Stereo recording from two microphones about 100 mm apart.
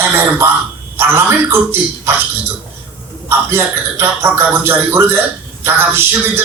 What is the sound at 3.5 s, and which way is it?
Speech, 25° right (ahead or behind).